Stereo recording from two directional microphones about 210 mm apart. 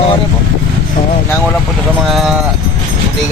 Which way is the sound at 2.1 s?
Centre (ahead or behind).